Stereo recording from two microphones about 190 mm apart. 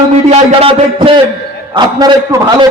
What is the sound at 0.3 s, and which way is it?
A man's voice, 30° right (ahead or behind).